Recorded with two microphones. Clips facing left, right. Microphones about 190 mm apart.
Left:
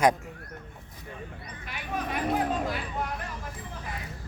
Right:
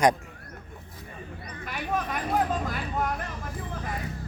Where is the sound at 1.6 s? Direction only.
45° right (ahead or behind).